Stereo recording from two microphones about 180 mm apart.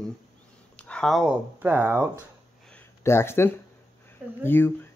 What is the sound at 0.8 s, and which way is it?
Speech, 5° left (ahead or behind).